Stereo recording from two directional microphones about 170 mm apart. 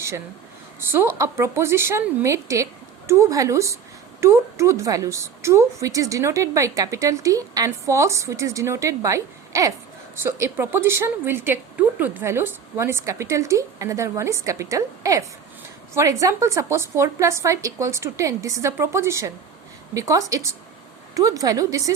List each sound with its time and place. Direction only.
0.8 s a woman's voice: 15° right (ahead or behind)
16.2 s a woman's voice: 20° right (ahead or behind)